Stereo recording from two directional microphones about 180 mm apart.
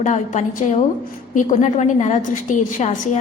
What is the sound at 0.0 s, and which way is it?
A woman's voice, 40° left (ahead or behind).